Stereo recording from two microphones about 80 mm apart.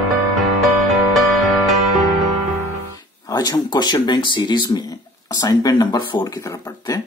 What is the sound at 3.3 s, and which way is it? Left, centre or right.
Speech, left.